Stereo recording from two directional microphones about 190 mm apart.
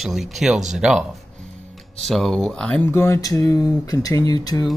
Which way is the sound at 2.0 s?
Centre (ahead or behind).